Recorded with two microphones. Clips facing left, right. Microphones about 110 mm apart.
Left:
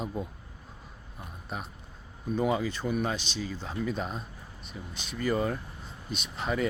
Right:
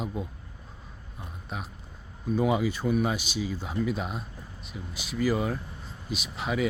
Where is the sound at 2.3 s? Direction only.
5° right (ahead or behind).